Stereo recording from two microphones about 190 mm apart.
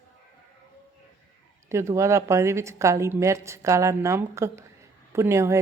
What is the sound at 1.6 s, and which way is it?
Speech, 15° right (ahead or behind).